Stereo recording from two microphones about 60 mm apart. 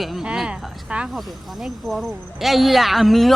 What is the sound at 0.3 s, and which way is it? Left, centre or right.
Speech, centre.